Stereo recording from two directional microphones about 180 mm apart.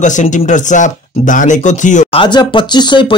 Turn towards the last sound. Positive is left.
turn(degrees=25)  # may be behind; listen again after turning